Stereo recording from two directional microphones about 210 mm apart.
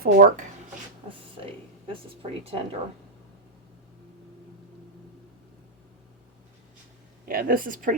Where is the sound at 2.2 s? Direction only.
25° right (ahead or behind).